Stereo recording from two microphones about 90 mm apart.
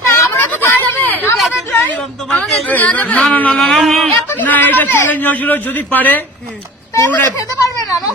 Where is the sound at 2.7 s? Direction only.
15° left (ahead or behind); by 4.0 s centre (ahead or behind).